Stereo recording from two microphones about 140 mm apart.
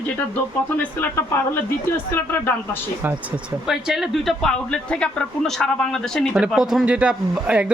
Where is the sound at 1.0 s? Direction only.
15° left (ahead or behind).